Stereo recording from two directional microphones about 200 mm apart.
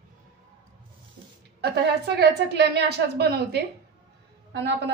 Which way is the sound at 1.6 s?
55° right (ahead or behind).